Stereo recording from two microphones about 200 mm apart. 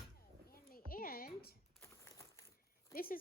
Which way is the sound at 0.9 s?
45° left (ahead or behind).